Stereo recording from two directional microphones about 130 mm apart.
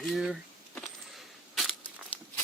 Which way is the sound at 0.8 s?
Centre (ahead or behind).